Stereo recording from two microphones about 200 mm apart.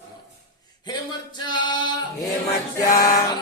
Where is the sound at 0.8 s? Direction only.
20° left (ahead or behind).